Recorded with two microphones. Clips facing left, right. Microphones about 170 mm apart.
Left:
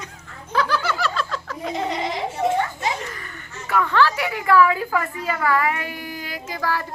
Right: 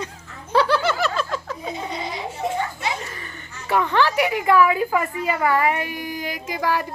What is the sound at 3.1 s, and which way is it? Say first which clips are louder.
A woman's voice: left 1 dB; 25° right (ahead or behind).